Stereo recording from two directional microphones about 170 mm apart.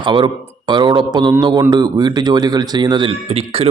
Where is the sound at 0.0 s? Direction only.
30° right (ahead or behind).